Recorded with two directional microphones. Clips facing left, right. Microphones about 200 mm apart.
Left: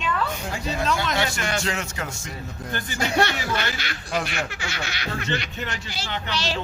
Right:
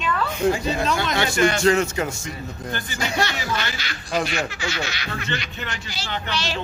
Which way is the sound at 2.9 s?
55° left (ahead or behind).